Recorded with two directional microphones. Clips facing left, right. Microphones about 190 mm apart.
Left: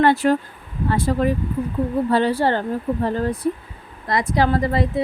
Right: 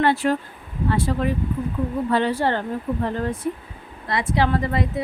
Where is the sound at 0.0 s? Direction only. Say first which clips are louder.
Left 3 dB; 40° left (ahead or behind).